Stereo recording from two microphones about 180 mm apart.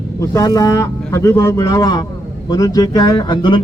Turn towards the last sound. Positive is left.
turn(degrees=25)  # may be behind; listen again after turning